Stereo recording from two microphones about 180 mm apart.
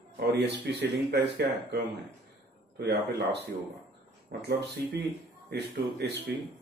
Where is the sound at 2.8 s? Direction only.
70° right (ahead or behind).